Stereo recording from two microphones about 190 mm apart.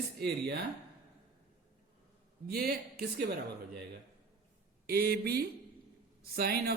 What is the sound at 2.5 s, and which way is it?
Speech, 50° right (ahead or behind).